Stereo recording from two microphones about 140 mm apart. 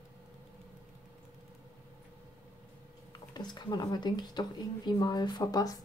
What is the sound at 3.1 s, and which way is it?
Speech, 30° left (ahead or behind).